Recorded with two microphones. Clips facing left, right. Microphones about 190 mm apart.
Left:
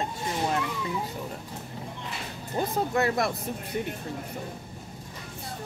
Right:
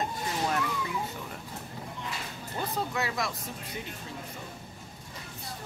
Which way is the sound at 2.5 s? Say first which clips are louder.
Left 6 dB; 50° left (ahead or behind).